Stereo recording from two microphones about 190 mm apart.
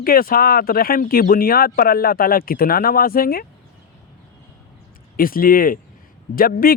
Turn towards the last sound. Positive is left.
turn(degrees=50)  # may be behind; listen again after turning